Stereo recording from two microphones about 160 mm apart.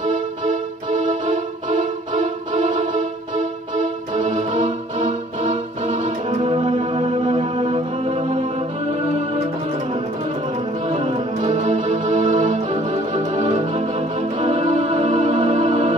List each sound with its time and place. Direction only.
0.0 s music: 50° right (ahead or behind)
6.4 s music: 30° right (ahead or behind)
10.9 s music: 40° right (ahead or behind)
12.9 s organ: 45° right (ahead or behind)
15.3 s music: 45° right (ahead or behind)